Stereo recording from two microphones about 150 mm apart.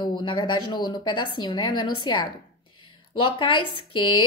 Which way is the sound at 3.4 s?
35° left (ahead or behind).